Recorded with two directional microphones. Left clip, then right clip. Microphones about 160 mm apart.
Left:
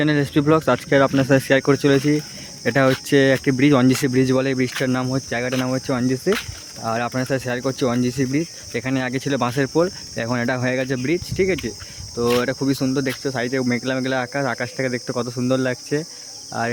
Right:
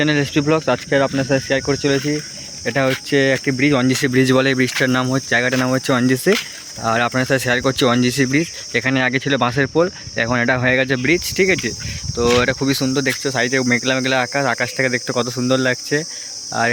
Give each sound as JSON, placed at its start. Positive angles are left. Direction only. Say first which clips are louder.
{"t": 0.0, "sound": "speech", "louder": "right 2 dB", "side_deg": 10}
{"t": 4.1, "sound": "speech", "louder": "right 4 dB", "side_deg": 0}